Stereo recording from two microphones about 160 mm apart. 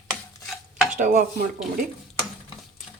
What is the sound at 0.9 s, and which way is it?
Chopping, 50° right (ahead or behind).